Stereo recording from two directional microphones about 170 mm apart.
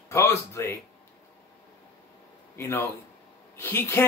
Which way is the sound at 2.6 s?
15° left (ahead or behind).